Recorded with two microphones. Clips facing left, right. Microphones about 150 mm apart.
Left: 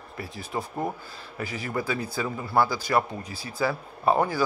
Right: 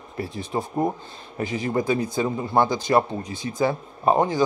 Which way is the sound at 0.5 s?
25° right (ahead or behind).